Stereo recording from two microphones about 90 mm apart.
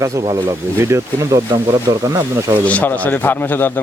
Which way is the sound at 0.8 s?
30° right (ahead or behind).